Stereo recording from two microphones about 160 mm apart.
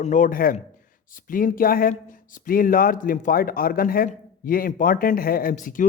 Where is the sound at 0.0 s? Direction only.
50° left (ahead or behind).